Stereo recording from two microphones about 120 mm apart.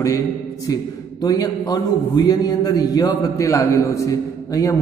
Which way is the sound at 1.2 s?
35° left (ahead or behind).